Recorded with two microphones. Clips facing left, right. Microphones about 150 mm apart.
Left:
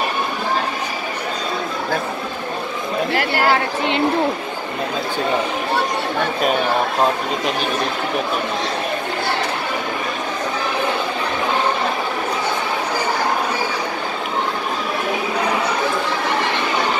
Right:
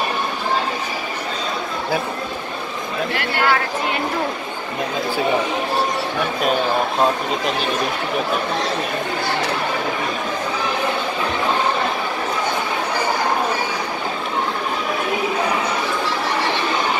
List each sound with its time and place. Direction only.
3.2 s speech: 40° left (ahead or behind)